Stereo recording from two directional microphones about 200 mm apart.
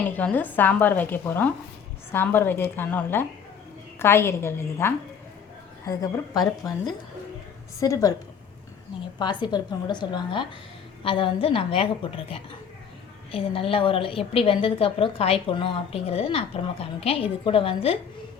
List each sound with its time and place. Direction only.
0.0 s a woman's voice: 5° left (ahead or behind)
9.1 s a woman's voice: 20° left (ahead or behind)